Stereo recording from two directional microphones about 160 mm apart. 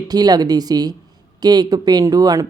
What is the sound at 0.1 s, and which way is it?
Speech, 25° right (ahead or behind).